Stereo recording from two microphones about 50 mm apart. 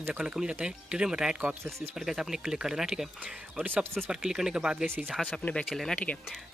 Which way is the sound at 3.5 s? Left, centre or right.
Right.